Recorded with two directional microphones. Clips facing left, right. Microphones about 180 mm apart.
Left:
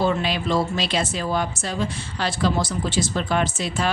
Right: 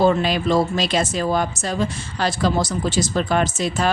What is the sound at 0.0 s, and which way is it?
Speech, 45° right (ahead or behind).